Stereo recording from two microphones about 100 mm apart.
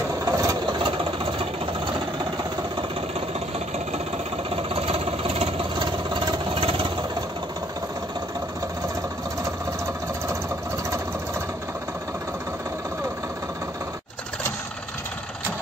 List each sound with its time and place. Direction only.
0.2 s vehicle: 35° right (ahead or behind)
4.7 s vehicle: 70° right (ahead or behind)
5.8 s vehicle: 50° right (ahead or behind); by 6.9 s 65° right (ahead or behind)